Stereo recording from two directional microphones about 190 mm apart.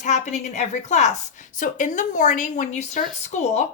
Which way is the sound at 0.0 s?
40° left (ahead or behind).